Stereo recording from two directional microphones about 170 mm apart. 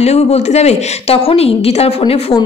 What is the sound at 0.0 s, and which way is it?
A woman's voice, 40° left (ahead or behind).